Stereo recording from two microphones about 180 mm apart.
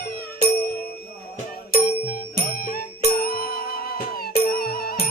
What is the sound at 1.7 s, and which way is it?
Music, 55° left (ahead or behind).